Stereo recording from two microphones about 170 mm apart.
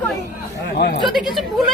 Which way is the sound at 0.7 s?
70° left (ahead or behind).